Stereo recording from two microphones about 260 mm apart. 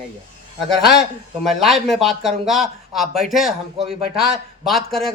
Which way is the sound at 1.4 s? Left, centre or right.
Centre.